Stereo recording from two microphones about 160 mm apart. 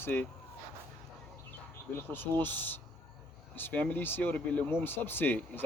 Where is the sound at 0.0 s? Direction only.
10° left (ahead or behind).